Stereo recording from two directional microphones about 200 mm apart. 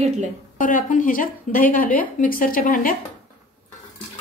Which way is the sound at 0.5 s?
40° left (ahead or behind).